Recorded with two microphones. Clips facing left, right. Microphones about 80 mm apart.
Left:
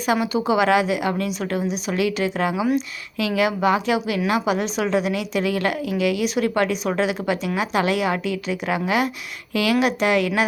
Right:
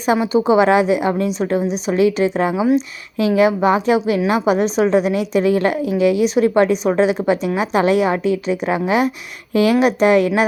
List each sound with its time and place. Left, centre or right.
0.0 s a woman's voice: right